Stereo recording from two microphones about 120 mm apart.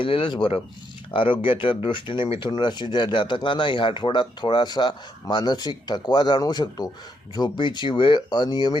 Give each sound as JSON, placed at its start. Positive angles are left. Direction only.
{"t": 0.0, "sound": "a man's voice", "side_deg": 45}